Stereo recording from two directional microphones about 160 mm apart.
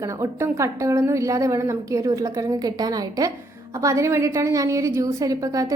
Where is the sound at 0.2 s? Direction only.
15° right (ahead or behind).